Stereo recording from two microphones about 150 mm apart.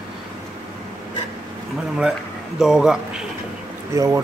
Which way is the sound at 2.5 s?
Centre (ahead or behind).